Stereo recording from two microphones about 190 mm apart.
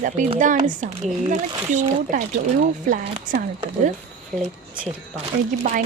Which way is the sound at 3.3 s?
45° right (ahead or behind).